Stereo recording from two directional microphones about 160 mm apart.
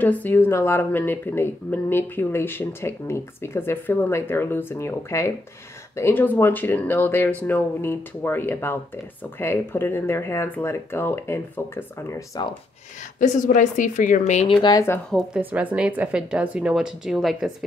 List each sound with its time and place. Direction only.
0.0 s speech: 10° left (ahead or behind)
13.2 s a woman's voice: 50° left (ahead or behind)
14.6 s speech: 20° left (ahead or behind)
15.0 s speech: centre (ahead or behind)
15.5 s speech: 10° right (ahead or behind)